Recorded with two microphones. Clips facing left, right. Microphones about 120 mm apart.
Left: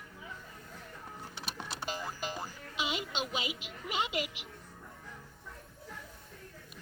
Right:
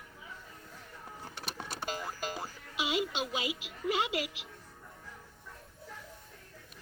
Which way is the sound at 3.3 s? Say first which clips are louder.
Right 2 dB; 20° left (ahead or behind).